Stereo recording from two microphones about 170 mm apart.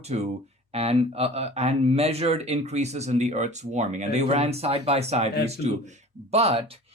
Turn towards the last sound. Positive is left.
turn(degrees=-35)  # may be behind; listen again after turning